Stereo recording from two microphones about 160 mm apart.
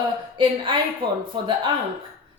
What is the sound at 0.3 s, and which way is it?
A woman's voice, 30° right (ahead or behind).